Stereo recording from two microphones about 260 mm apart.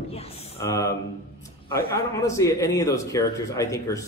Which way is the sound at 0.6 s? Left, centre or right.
Centre.